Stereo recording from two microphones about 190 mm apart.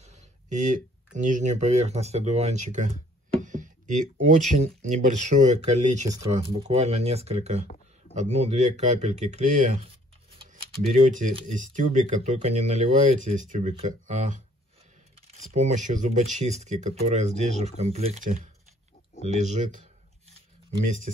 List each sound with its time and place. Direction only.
0.0 s speech: 35° right (ahead or behind)
20.8 s speech: 40° right (ahead or behind)